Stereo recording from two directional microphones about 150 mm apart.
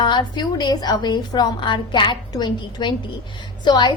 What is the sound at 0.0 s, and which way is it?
A woman's voice, 30° left (ahead or behind).